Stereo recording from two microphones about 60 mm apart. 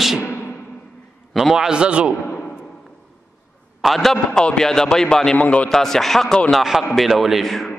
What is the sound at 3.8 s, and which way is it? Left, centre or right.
A man's voice, centre.